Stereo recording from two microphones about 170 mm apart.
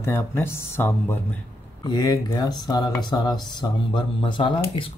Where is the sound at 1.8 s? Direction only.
25° left (ahead or behind).